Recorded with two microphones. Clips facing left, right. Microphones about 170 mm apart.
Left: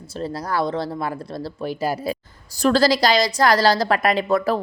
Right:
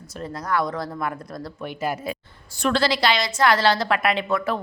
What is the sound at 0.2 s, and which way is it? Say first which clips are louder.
A woman's voice: left 2 dB; 30° left (ahead or behind).